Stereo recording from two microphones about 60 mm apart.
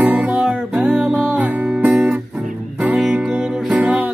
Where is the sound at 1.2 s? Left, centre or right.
Right.